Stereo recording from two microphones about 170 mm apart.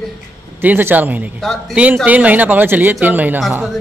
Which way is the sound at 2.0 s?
10° right (ahead or behind).